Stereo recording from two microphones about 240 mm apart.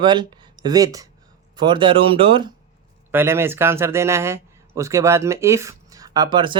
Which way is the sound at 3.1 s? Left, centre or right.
Centre.